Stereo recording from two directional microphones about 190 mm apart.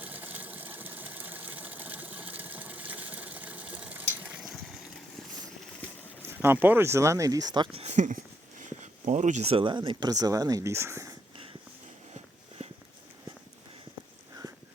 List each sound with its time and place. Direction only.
0.0 s sewing machine: 10° right (ahead or behind)
6.2 s speech: 10° right (ahead or behind)
7.8 s speech: 35° right (ahead or behind); by 11.1 s 15° right (ahead or behind)
12.1 s walk: 30° right (ahead or behind)